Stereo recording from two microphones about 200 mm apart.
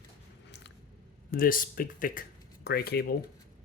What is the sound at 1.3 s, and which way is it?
Speech, 45° left (ahead or behind).